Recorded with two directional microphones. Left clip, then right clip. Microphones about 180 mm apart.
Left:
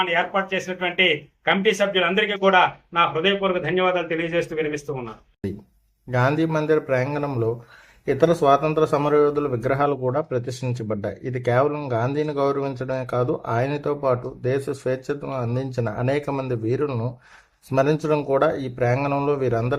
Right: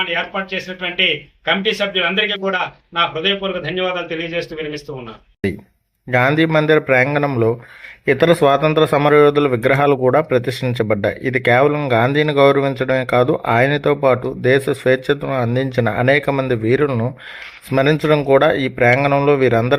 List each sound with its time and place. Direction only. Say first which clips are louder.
0.0 s a man's voice: right 1 dB; centre (ahead or behind)
6.1 s a man's voice: right 7 dB; 20° right (ahead or behind)